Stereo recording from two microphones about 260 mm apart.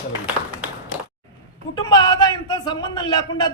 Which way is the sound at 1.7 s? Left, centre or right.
Centre.